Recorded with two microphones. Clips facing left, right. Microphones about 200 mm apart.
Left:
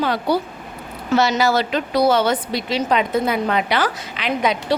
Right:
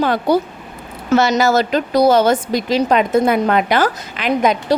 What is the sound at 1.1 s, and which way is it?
A woman's voice, 45° right (ahead or behind).